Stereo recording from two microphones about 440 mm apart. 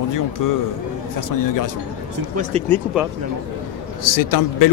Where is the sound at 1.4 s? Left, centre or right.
Left.